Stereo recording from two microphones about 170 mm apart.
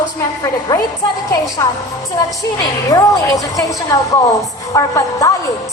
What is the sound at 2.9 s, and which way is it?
A woman's voice, 20° left (ahead or behind).